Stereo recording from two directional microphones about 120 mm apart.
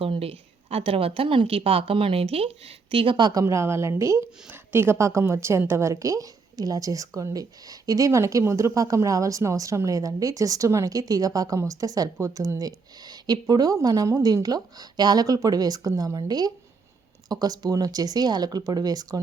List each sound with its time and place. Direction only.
0.0 s a woman's voice: 50° right (ahead or behind); by 3.4 s 35° right (ahead or behind)
3.4 s a woman's voice: 20° right (ahead or behind)